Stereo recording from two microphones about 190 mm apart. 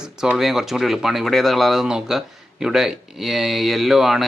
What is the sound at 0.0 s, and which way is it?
Speech, 5° right (ahead or behind).